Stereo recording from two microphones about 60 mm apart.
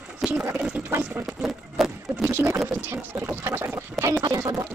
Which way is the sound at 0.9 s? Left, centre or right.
Right.